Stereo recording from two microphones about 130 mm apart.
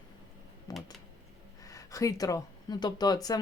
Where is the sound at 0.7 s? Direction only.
30° left (ahead or behind).